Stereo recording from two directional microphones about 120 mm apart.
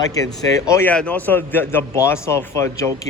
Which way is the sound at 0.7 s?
20° left (ahead or behind).